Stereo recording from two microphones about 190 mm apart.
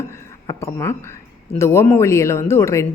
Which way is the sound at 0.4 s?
15° left (ahead or behind).